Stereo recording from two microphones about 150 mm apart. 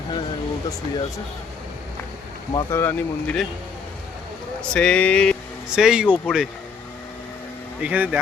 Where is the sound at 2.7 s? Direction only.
15° left (ahead or behind).